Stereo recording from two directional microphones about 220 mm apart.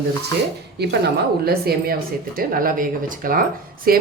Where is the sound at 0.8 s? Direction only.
50° right (ahead or behind).